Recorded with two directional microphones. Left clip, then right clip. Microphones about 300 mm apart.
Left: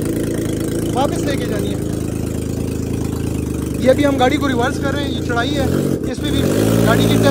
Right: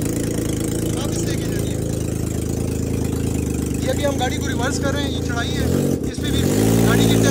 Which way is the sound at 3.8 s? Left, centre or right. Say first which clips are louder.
Left 9 dB; left.